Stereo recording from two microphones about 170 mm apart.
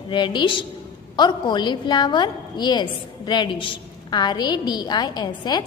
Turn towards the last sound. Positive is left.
turn(degrees=25)  # may be behind; listen again after turning